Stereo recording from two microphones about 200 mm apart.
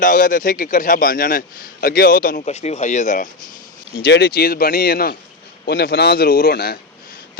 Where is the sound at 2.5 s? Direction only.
35° left (ahead or behind).